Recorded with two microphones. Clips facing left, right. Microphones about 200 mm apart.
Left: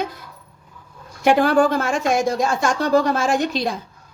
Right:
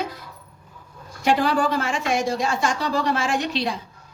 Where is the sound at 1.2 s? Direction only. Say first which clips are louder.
Left 5 dB; 55° left (ahead or behind).